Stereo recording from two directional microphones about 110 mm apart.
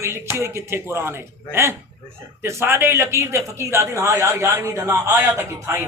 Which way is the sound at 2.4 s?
25° right (ahead or behind).